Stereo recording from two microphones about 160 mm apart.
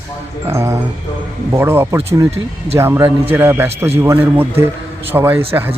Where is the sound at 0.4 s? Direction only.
15° right (ahead or behind).